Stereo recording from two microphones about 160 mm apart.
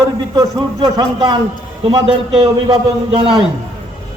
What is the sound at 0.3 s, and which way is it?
A man's voice, 25° right (ahead or behind).